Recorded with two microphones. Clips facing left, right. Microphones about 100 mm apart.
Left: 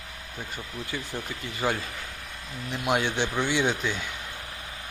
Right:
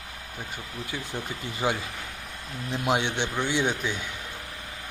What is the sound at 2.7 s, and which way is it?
Speech, 30° right (ahead or behind).